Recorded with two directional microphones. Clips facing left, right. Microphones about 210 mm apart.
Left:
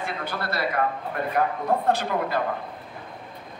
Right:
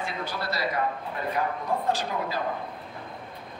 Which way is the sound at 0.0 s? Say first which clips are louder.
Left 2 dB; 55° left (ahead or behind).